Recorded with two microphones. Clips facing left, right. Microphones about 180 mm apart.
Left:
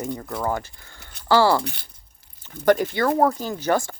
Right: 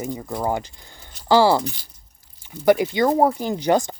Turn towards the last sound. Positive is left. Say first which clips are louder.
# right 3 dB
turn(degrees=-20)  # may be behind; listen again after turning